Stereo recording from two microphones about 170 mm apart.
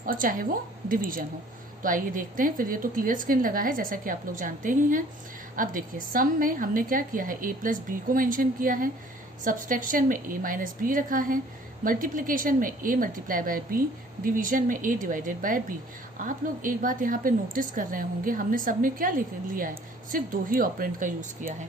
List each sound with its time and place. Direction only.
0.0 s a woman's voice: 55° right (ahead or behind)